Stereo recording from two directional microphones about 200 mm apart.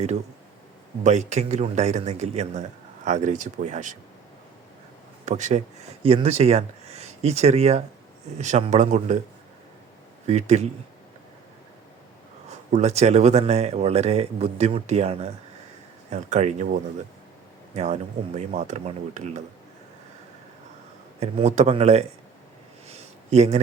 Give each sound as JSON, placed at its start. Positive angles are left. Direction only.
{"t": 1.0, "sound": "a man's voice", "side_deg": -35}
{"t": 5.2, "sound": "a man's voice", "side_deg": -35}
{"t": 10.2, "sound": "a man's voice", "side_deg": -35}
{"t": 12.5, "sound": "a man's voice", "side_deg": -35}
{"t": 17.7, "sound": "a man's voice", "side_deg": -35}
{"t": 21.2, "sound": "a man's voice", "side_deg": -35}
{"t": 22.9, "sound": "a sound", "side_deg": -35}